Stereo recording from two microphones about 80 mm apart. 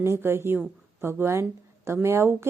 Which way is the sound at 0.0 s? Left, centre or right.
Right.